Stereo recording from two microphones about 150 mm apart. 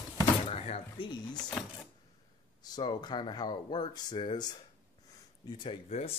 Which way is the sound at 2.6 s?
30° left (ahead or behind).